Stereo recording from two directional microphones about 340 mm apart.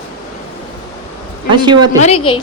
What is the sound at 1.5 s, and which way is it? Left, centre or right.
Speech, centre.